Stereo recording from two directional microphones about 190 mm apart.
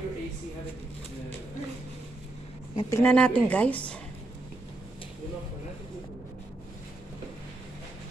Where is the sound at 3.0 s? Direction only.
10° left (ahead or behind).